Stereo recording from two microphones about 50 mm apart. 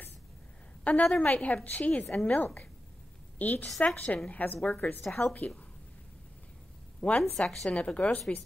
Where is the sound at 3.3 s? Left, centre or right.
Left.